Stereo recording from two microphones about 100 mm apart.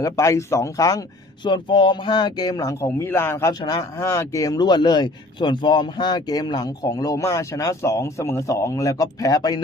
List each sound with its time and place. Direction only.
0.0 s a man's voice: 30° left (ahead or behind)
1.5 s speech: 50° left (ahead or behind)
7.3 s a man's voice: 25° left (ahead or behind)